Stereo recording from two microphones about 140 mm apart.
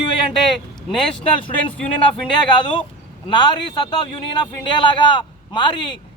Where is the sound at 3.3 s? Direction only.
30° left (ahead or behind).